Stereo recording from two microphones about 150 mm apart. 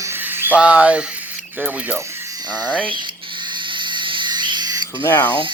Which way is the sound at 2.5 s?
10° left (ahead or behind).